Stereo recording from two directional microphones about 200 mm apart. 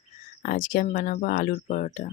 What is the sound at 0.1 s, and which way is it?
Speech, 40° left (ahead or behind).